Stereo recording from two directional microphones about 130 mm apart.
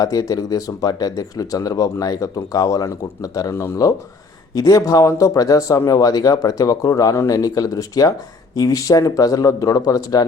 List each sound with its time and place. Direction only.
0.0 s speech: 30° left (ahead or behind)